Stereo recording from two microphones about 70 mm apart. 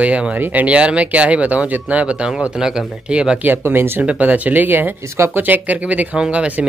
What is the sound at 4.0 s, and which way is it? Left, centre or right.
Speech, right.